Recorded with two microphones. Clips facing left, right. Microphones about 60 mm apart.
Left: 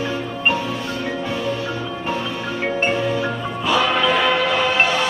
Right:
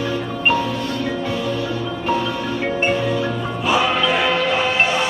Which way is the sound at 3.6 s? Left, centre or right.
Centre.